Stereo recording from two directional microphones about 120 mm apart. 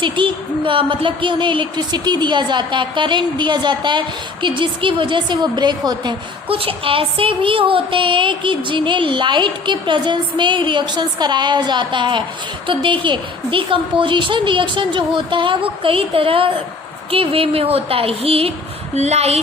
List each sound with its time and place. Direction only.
0.0 s speech: 45° right (ahead or behind)
6.5 s a woman's voice: 50° right (ahead or behind)
18.9 s speech: 65° right (ahead or behind)